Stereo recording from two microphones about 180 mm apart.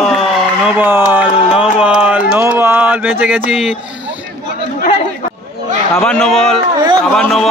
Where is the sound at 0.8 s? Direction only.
10° right (ahead or behind).